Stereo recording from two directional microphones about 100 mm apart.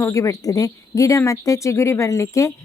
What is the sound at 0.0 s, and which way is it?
Speech, 35° left (ahead or behind).